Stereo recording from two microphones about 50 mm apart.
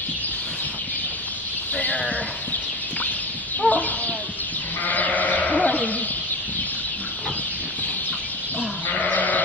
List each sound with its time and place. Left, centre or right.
1.8 s sheep: left
3.6 s fowl: left
4.8 s sheep: left
9.0 s sheep: left